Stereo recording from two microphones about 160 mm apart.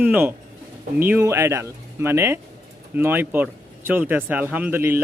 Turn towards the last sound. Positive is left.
turn(degrees=-15)  # may be behind; listen again after turning